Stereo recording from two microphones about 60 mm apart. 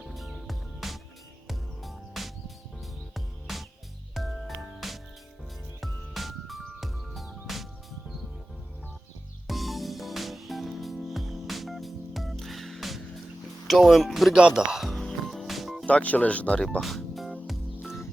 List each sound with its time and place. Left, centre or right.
0.0 s music: centre
9.5 s music: centre
13.7 s speech: centre
14.3 s speech: centre
15.3 s music: centre
15.9 s speech: left
16.8 s music: centre